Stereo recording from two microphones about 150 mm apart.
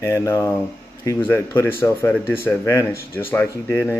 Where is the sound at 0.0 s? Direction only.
20° left (ahead or behind).